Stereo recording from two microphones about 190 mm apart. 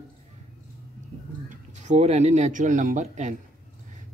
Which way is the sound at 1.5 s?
40° right (ahead or behind).